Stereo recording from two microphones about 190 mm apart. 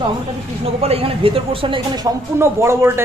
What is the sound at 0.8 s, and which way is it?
A woman's voice, 30° right (ahead or behind).